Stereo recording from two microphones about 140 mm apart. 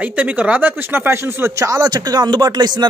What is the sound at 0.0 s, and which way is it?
Speech, 10° right (ahead or behind).